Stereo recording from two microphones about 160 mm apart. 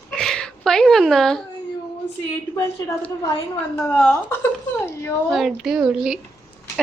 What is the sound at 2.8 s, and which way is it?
A woman's voice, 20° left (ahead or behind).